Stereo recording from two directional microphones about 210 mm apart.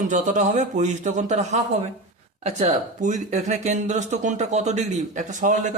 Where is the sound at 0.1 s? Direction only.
35° right (ahead or behind).